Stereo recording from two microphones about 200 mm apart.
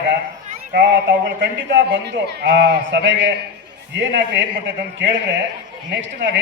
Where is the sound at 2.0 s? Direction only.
55° right (ahead or behind).